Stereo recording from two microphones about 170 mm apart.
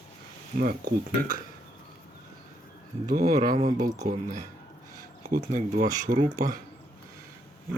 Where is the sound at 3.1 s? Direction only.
55° right (ahead or behind).